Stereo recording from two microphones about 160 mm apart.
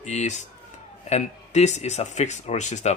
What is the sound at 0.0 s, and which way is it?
Speech, 45° left (ahead or behind).